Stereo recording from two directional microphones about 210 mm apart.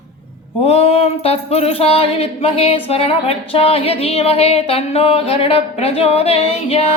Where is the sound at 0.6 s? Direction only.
30° left (ahead or behind).